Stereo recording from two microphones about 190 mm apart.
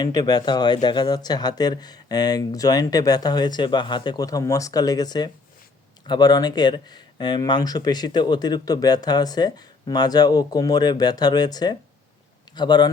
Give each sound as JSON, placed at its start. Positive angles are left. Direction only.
{"t": 0.0, "sound": "speech", "side_deg": 20}